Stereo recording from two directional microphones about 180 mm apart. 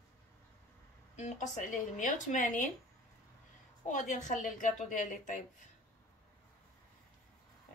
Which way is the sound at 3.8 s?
45° left (ahead or behind).